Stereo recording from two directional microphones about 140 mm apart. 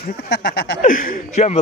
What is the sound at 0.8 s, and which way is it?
Speech, 75° left (ahead or behind).